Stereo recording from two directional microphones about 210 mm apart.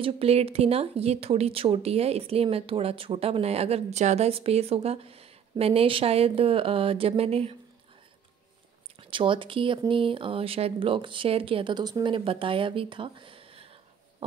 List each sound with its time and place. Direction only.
0.0 s speech: 30° right (ahead or behind)
9.1 s speech: 25° right (ahead or behind)